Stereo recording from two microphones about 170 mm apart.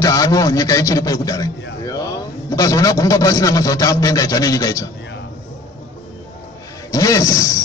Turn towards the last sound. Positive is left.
turn(degrees=20)  # may be behind; listen again after turning